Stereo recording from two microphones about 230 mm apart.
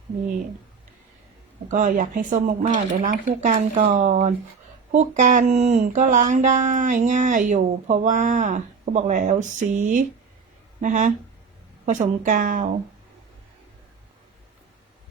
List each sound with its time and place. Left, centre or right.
1.7 s speech: right